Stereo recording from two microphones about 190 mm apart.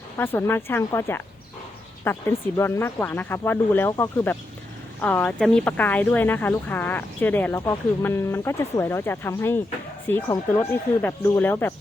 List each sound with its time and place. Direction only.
0.2 s speech: 10° left (ahead or behind)